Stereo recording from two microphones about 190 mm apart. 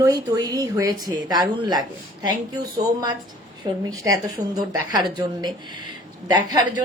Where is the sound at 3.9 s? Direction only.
20° right (ahead or behind).